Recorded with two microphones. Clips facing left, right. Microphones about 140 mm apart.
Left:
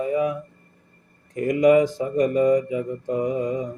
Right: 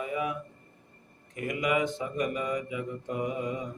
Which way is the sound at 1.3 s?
40° left (ahead or behind).